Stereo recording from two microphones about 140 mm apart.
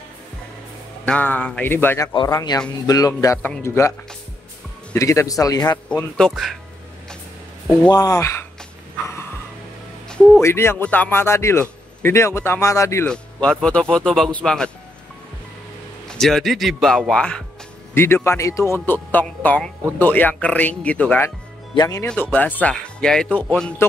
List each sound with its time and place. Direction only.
1.0 s speech: 10° left (ahead or behind)
2.1 s speech: 30° left (ahead or behind)
4.9 s speech: 20° left (ahead or behind)
6.1 s speech: 5° left (ahead or behind)
7.9 s speech: 25° left (ahead or behind)
9.0 s music: 20° left (ahead or behind)
10.0 s a sound: 5° left (ahead or behind)
10.4 s a man's voice: 20° left (ahead or behind)
13.0 s speech: 5° left (ahead or behind)
16.1 s speech: centre (ahead or behind)
17.9 s speech: 15° left (ahead or behind)
21.7 s speech: 25° left (ahead or behind)
22.0 s speech: 10° left (ahead or behind)